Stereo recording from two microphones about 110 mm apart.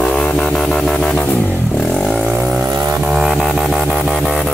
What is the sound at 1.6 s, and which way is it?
Vehicle, 5° left (ahead or behind).